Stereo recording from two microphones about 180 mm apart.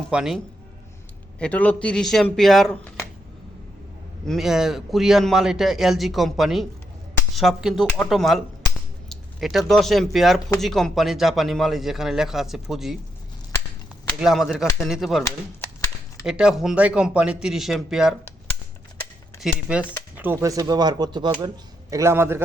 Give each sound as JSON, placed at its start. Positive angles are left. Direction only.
{"t": 0.1, "sound": "a man's voice", "side_deg": -5}
{"t": 1.4, "sound": "a man's voice", "side_deg": 5}
{"t": 4.3, "sound": "a man's voice", "side_deg": 0}
{"t": 14.2, "sound": "a man's voice", "side_deg": 0}
{"t": 16.2, "sound": "a man's voice", "side_deg": -5}
{"t": 19.4, "sound": "speech", "side_deg": -5}